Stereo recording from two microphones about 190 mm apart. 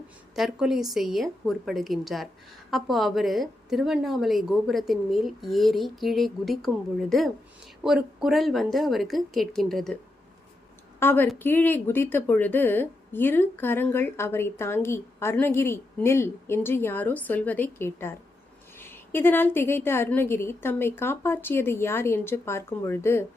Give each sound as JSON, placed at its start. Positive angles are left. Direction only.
{"t": 0.3, "sound": "a woman's voice", "side_deg": 0}
{"t": 7.9, "sound": "a woman's voice", "side_deg": 0}
{"t": 11.0, "sound": "a woman's voice", "side_deg": 10}